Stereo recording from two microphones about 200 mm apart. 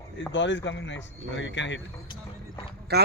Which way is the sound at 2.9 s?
55° right (ahead or behind).